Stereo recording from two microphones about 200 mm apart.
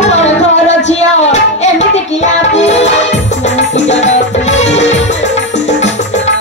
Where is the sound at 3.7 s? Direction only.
35° left (ahead or behind).